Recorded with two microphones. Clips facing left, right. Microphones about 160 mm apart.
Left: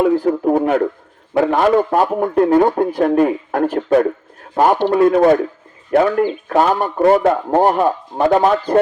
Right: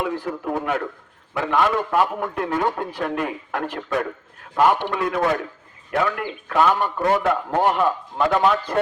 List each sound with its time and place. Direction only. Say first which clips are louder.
0.0 s a man's voice: left 11 dB; 40° left (ahead or behind)